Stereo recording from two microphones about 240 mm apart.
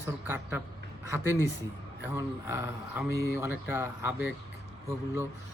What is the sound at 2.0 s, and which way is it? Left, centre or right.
Speech, centre.